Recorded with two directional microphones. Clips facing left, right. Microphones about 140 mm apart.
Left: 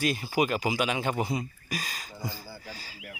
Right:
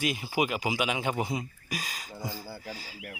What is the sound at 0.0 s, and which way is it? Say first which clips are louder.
Speech: left 2 dB; 15° right (ahead or behind).